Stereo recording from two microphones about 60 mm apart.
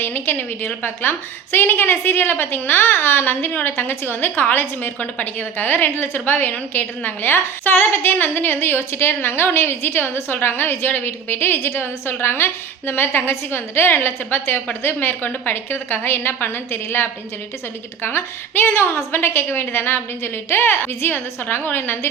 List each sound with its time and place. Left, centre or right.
0.0 s a woman's voice: left